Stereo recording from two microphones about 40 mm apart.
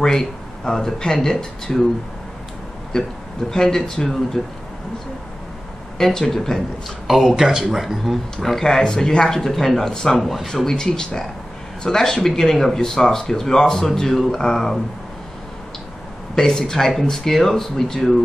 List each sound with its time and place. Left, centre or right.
0.0 s speech: centre
2.9 s speech: centre
4.4 s speech: centre
5.9 s speech: centre
7.1 s speech: centre
8.5 s speech: centre
10.5 s speech: centre
16.3 s speech: centre